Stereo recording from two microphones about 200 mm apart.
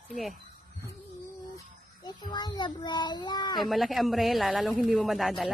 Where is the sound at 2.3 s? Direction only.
20° left (ahead or behind).